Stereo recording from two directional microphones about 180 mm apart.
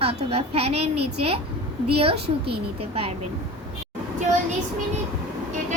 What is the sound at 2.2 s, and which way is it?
Speech, 65° right (ahead or behind).